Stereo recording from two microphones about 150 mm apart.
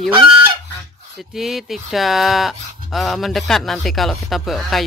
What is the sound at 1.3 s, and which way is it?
Speech, centre (ahead or behind).